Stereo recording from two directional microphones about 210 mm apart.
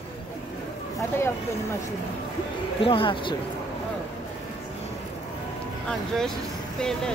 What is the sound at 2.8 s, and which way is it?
Speech, 25° left (ahead or behind).